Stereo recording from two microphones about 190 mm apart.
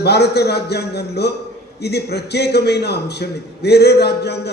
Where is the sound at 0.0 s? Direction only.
60° left (ahead or behind).